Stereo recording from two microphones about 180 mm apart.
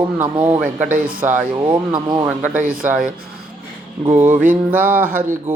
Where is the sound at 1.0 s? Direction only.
50° right (ahead or behind).